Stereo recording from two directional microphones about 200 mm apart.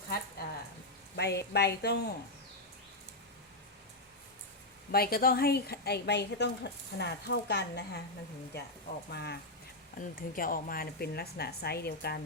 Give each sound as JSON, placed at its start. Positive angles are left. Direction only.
{"t": 1.1, "sound": "speech", "side_deg": 60}
{"t": 4.9, "sound": "a woman's voice", "side_deg": 50}
{"t": 9.1, "sound": "a woman's voice", "side_deg": 55}
{"t": 10.2, "sound": "a woman's voice", "side_deg": 45}